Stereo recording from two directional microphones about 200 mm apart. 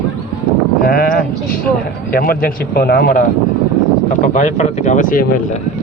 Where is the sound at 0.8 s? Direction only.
45° left (ahead or behind).